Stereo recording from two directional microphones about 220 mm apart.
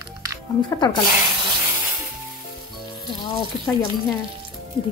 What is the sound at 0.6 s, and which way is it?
Speech, 20° left (ahead or behind).